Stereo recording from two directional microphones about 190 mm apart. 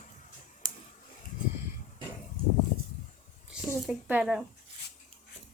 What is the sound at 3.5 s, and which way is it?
Speech, 5° right (ahead or behind).